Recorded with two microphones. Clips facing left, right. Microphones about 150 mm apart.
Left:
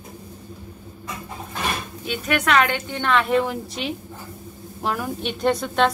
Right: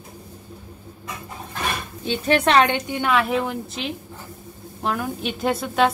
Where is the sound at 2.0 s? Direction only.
30° right (ahead or behind).